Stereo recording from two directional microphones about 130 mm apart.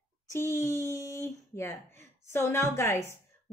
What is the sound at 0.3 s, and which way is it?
Speech, 20° left (ahead or behind).